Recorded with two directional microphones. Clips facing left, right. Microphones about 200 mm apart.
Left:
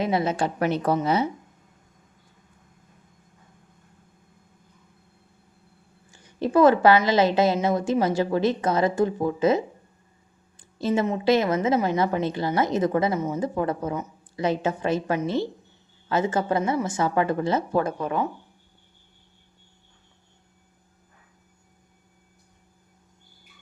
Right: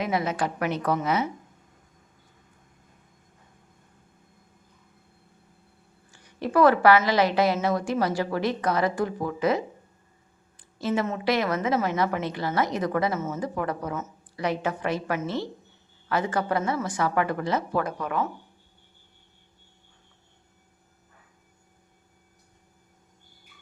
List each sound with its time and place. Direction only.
0.0 s a woman's voice: 30° left (ahead or behind)
6.1 s a woman's voice: 25° left (ahead or behind)